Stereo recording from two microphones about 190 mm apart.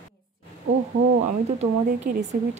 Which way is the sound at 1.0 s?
35° right (ahead or behind).